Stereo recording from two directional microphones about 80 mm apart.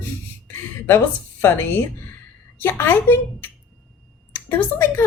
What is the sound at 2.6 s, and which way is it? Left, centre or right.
A woman's voice, left.